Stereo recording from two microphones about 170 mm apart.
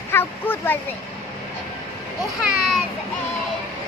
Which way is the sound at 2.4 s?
5° right (ahead or behind).